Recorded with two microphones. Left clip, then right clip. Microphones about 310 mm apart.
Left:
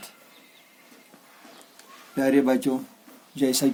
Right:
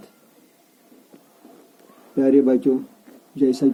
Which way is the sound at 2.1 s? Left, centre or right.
Left.